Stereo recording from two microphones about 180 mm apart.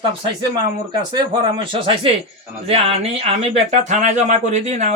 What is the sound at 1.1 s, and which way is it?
Speech, 25° right (ahead or behind).